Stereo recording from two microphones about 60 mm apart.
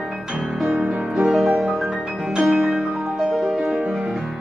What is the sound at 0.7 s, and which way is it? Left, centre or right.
Music, centre.